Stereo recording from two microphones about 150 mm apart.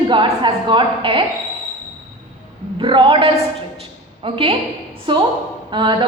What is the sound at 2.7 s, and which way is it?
A woman's voice, 35° right (ahead or behind).